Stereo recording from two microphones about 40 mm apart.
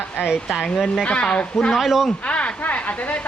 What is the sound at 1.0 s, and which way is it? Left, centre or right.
Speech, left.